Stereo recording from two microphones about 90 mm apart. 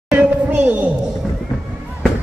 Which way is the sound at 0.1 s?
20° right (ahead or behind).